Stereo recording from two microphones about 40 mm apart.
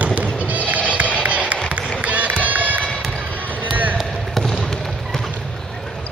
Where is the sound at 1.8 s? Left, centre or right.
Right.